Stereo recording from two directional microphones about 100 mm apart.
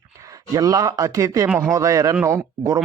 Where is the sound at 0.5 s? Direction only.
35° right (ahead or behind).